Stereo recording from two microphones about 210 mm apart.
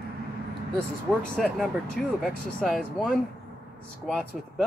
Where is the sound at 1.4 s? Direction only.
Centre (ahead or behind).